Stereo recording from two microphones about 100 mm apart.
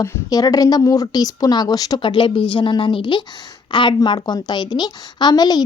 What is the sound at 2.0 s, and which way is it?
A woman's voice, 55° left (ahead or behind).